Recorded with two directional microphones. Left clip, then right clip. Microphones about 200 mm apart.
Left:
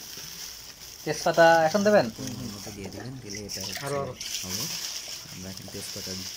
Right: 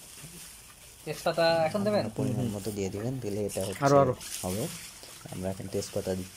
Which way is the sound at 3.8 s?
60° right (ahead or behind).